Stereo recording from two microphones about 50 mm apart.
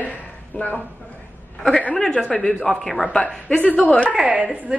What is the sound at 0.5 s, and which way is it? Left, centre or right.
Speech, left.